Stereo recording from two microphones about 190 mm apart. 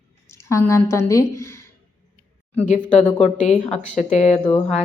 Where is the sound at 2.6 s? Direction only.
40° left (ahead or behind).